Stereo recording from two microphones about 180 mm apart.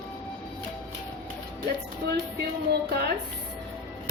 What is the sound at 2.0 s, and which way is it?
Speech, 65° right (ahead or behind).